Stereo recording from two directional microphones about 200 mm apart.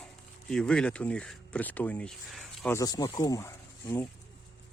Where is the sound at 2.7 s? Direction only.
20° left (ahead or behind).